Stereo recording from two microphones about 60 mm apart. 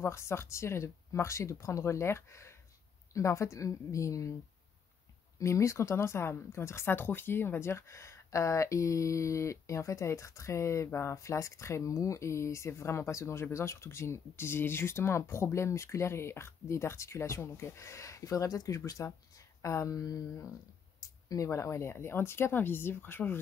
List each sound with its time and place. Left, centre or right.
0.0 s a woman's voice: left
5.4 s speech: left
21.5 s speech: left